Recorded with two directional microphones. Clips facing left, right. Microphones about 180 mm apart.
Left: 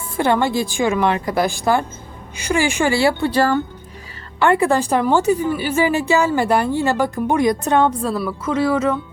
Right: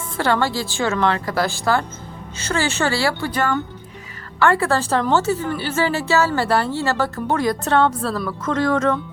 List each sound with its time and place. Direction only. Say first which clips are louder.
0.2 s a woman's voice: left 3 dB; 20° left (ahead or behind)
4.4 s a woman's voice: left 2 dB; 20° left (ahead or behind)